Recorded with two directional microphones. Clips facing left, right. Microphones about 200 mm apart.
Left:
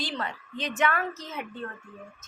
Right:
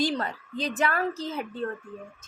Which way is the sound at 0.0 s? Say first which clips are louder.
Right 6 dB; 40° right (ahead or behind).